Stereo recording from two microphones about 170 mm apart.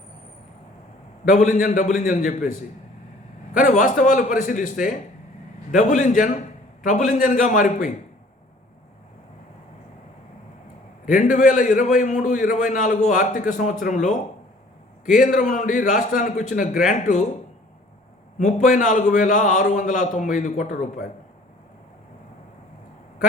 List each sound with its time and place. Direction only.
1.2 s a man's voice: 50° left (ahead or behind)
3.6 s a man's voice: 45° left (ahead or behind)
11.0 s a man's voice: 50° left (ahead or behind)
18.3 s a man's voice: 50° left (ahead or behind)